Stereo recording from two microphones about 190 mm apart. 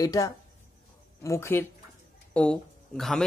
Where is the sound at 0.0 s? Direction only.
20° left (ahead or behind).